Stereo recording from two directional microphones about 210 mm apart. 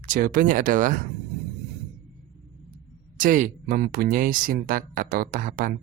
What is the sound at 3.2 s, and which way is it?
Speech, 40° right (ahead or behind).